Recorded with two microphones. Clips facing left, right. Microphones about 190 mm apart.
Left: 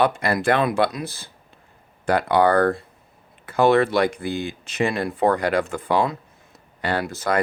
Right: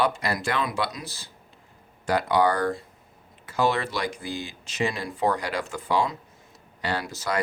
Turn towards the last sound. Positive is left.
turn(degrees=55)  # may be behind; listen again after turning